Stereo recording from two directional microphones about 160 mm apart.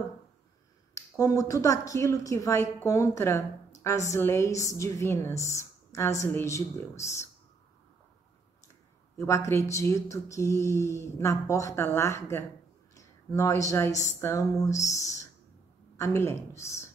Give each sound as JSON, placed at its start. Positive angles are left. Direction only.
{"t": 0.9, "sound": "a woman's voice", "side_deg": 20}
{"t": 9.2, "sound": "a woman's voice", "side_deg": 15}